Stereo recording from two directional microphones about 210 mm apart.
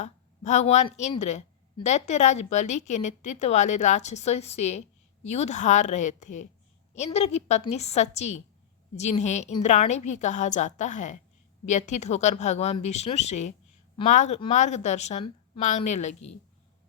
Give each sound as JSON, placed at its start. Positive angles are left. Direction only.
{"t": 0.0, "sound": "a woman's voice", "side_deg": 35}